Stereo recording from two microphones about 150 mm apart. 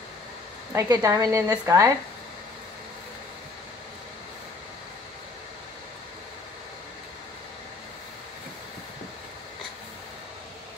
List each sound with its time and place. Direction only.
0.7 s a woman's voice: 25° right (ahead or behind)